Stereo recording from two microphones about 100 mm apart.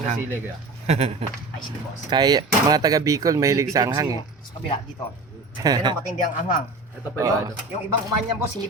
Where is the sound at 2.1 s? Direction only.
40° right (ahead or behind).